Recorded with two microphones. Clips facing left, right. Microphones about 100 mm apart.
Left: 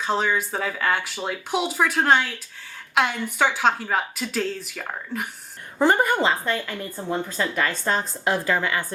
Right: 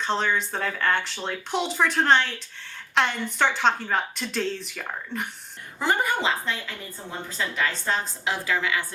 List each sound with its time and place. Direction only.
0.0 s a woman's voice: 5° left (ahead or behind)
5.8 s a woman's voice: 45° left (ahead or behind)